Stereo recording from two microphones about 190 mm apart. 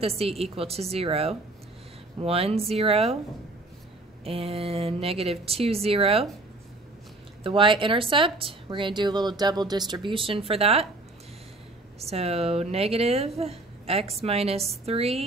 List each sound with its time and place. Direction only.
0.0 s a woman's voice: 30° right (ahead or behind)
4.2 s a woman's voice: 30° right (ahead or behind)
7.4 s speech: 25° right (ahead or behind)
12.0 s a woman's voice: 35° right (ahead or behind)